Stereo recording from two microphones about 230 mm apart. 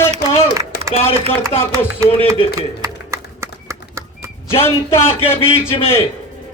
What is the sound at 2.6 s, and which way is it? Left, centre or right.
Horse, centre.